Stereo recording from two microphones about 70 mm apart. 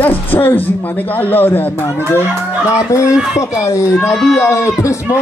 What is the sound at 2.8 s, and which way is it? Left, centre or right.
Speech, left.